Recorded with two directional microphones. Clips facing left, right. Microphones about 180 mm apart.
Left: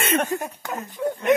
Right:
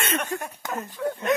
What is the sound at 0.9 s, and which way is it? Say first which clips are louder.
Speech: left 3 dB; 15° left (ahead or behind).